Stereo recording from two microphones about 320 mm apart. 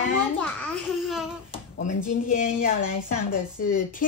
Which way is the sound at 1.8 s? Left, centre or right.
Left.